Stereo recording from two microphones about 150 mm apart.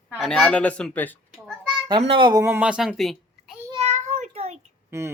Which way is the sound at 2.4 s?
10° right (ahead or behind).